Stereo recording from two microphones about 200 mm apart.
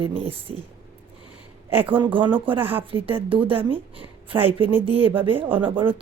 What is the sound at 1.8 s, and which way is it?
A woman's voice, 25° right (ahead or behind).